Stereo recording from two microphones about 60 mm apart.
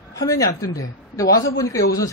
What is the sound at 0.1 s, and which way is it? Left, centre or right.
A woman's voice, left.